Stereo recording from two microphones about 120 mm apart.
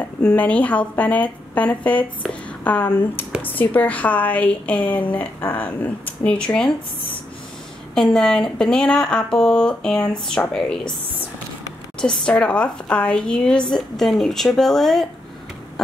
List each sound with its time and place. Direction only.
0.2 s a woman's voice: 10° left (ahead or behind)
12.0 s a woman's voice: 10° left (ahead or behind)